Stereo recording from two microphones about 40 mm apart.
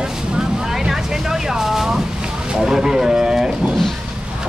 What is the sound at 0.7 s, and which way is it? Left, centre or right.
Vehicle, centre.